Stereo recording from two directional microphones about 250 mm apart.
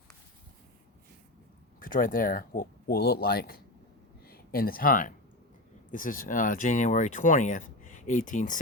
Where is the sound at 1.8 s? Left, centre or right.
Left.